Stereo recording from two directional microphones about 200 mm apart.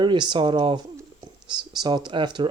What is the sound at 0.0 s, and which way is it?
Speech, 25° right (ahead or behind).